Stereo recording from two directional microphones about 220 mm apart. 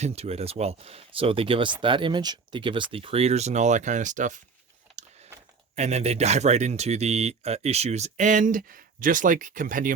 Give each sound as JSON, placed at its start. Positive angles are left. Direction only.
{"t": 0.0, "sound": "speech", "side_deg": -30}
{"t": 5.7, "sound": "speech", "side_deg": -30}